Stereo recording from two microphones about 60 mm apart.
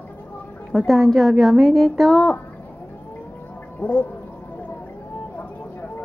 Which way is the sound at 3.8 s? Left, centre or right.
Left.